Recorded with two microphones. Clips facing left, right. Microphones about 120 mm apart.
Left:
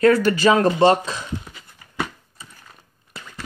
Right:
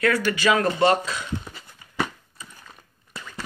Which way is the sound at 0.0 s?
40° left (ahead or behind).